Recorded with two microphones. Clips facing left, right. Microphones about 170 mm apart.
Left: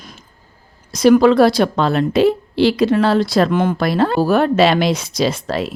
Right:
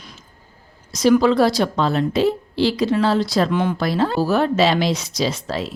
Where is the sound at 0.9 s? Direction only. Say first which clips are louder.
Left 4 dB; 60° left (ahead or behind).